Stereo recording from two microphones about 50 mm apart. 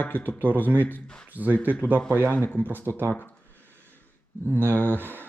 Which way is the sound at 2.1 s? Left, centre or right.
Right.